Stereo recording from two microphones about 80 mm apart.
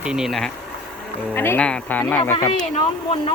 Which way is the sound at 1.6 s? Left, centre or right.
Centre.